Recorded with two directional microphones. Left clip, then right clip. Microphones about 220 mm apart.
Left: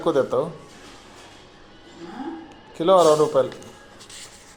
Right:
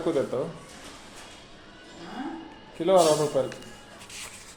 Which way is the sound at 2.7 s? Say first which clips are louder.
Left 5 dB; 35° left (ahead or behind).